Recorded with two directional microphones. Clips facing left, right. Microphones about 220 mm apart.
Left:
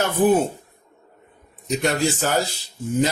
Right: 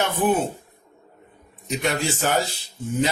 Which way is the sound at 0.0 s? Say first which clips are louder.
Left 4 dB; 40° left (ahead or behind).